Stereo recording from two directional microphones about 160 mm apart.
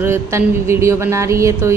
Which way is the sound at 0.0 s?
15° right (ahead or behind).